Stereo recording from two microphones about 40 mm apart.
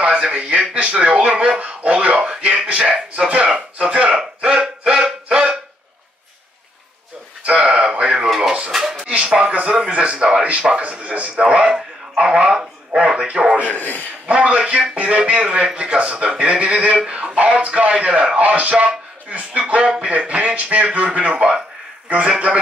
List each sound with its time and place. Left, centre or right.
0.0 s speech: right
3.3 s speech: right
4.2 s a sound: right
7.4 s a sound: right
8.7 s a sound: centre
9.2 s speech: right
9.8 s speech: right
11.2 s speech: right
13.7 s speech: left
14.2 s speech: right